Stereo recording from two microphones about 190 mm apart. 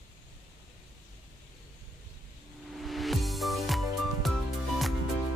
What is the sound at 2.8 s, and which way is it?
Music, centre (ahead or behind).